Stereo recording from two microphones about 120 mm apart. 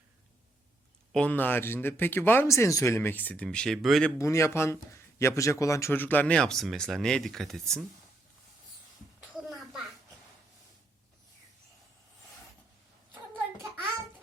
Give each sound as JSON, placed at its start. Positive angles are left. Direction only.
{"t": 1.1, "sound": "speech", "side_deg": 10}
{"t": 4.2, "sound": "speech", "side_deg": 25}
{"t": 9.5, "sound": "a sound", "side_deg": 0}